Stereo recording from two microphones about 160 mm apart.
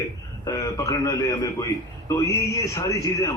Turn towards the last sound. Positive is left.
turn(degrees=25)  # may be behind; listen again after turning